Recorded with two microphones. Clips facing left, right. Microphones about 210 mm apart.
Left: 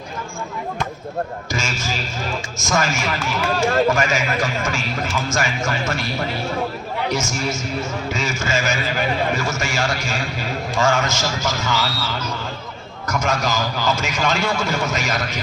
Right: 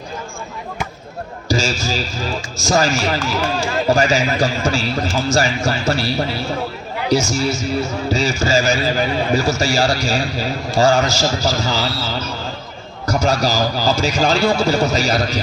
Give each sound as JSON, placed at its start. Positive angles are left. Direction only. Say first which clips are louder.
{"t": 1.5, "sound": "a man's voice", "louder": "right 6 dB", "side_deg": -35}